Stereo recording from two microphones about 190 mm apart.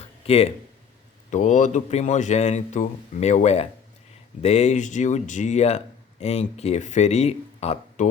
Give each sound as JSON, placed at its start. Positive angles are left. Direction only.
{"t": 0.3, "sound": "speech", "side_deg": 30}